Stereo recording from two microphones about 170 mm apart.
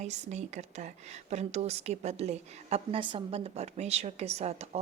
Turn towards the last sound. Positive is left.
turn(degrees=-40)  # may be behind; listen again after turning